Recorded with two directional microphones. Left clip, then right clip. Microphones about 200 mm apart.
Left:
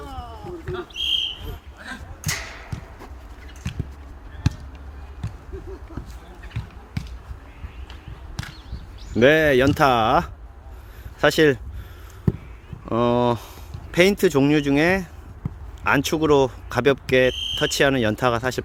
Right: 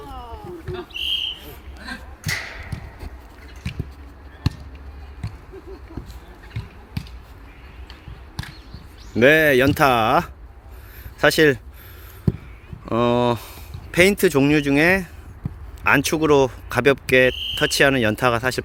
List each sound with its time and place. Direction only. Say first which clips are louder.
2.2 s a sound: right 2 dB; 40° right (ahead or behind)
9.1 s speech: right 2 dB; 5° left (ahead or behind)
12.8 s speech: right 1 dB; 5° left (ahead or behind)